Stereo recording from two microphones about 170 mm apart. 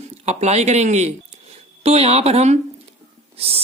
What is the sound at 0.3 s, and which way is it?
Speech, 40° right (ahead or behind).